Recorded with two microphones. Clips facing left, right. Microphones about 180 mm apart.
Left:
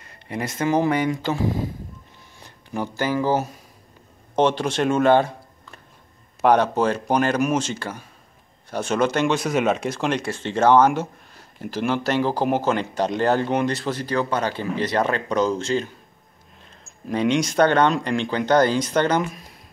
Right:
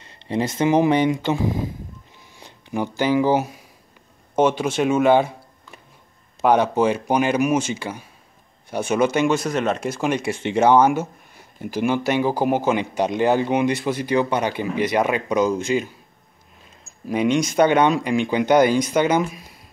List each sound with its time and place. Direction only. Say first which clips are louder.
0.0 s speech: right 6 dB; 25° right (ahead or behind)
17.1 s speech: right 1 dB; 10° right (ahead or behind)